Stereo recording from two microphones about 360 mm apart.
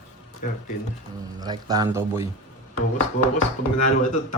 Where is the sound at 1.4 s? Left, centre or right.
Centre.